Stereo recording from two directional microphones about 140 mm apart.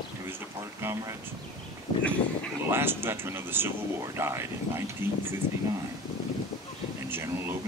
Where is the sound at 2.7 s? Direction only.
15° right (ahead or behind).